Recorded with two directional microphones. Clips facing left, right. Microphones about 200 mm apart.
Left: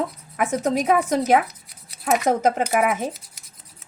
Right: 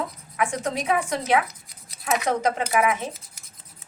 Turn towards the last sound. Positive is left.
turn(degrees=45)  # may be behind; listen again after turning